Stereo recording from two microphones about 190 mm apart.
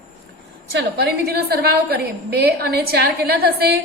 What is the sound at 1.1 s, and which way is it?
A woman's voice, 55° right (ahead or behind).